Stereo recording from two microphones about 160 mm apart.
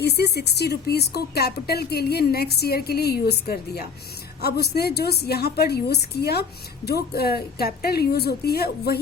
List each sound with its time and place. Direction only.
0.0 s speech: 90° left; by 3.8 s 70° left (ahead or behind)
4.4 s speech: 80° left